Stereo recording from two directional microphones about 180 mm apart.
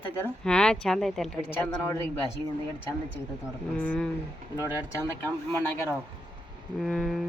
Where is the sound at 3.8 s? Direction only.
5° left (ahead or behind).